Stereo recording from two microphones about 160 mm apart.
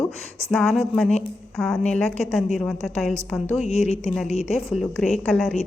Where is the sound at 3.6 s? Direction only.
40° left (ahead or behind).